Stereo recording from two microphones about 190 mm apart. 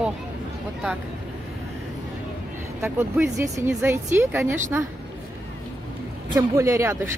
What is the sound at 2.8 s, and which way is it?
Speech, 10° right (ahead or behind).